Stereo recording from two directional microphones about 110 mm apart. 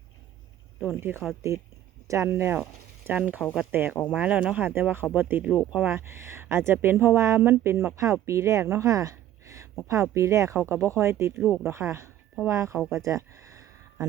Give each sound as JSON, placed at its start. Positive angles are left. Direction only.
{"t": 1.4, "sound": "speech", "side_deg": -25}
{"t": 11.3, "sound": "speech", "side_deg": -5}
{"t": 11.6, "sound": "speech", "side_deg": -25}
{"t": 12.9, "sound": "a sound", "side_deg": -30}